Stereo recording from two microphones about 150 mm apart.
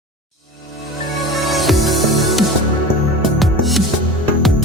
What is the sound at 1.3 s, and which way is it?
Music, centre (ahead or behind).